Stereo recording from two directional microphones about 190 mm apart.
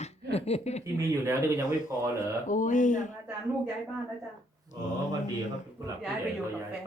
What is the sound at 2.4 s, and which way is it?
Speech, 40° left (ahead or behind).